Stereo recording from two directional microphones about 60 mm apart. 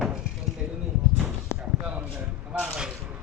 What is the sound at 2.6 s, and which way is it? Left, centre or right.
Basketball bounce, centre.